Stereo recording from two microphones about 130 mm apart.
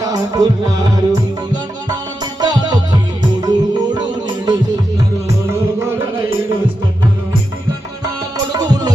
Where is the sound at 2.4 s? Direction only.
35° right (ahead or behind).